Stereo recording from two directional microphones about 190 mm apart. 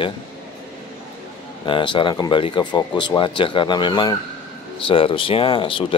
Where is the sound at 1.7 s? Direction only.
25° left (ahead or behind).